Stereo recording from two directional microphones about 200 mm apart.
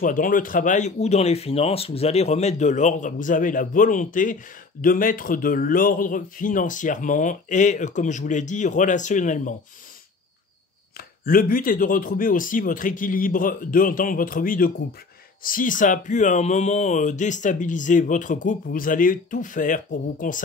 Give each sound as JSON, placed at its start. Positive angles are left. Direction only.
{"t": 0.0, "sound": "speech", "side_deg": 40}
{"t": 11.0, "sound": "speech", "side_deg": 45}